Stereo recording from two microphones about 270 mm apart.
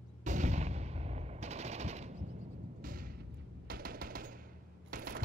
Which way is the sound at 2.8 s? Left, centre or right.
Right.